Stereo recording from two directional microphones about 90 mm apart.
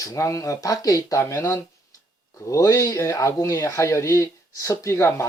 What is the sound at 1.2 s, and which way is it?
Speech, 30° left (ahead or behind).